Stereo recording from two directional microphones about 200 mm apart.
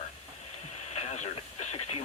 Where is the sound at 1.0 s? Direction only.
35° left (ahead or behind).